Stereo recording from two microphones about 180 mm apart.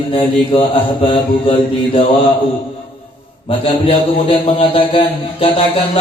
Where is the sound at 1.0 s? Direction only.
30° left (ahead or behind).